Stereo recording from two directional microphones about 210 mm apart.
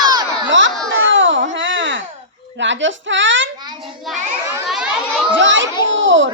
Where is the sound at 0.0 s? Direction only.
20° right (ahead or behind).